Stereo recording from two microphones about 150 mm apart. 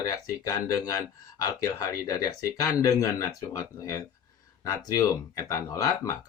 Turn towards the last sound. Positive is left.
turn(degrees=20)  # may be behind; listen again after turning